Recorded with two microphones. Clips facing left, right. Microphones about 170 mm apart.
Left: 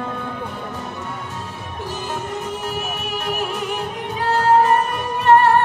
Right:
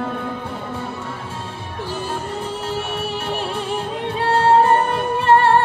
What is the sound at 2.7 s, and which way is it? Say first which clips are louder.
Music: right 2 dB; 30° right (ahead or behind).